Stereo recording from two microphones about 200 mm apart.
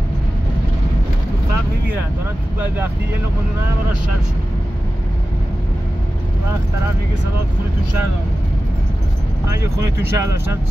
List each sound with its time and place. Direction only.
9.5 s speech: 15° right (ahead or behind)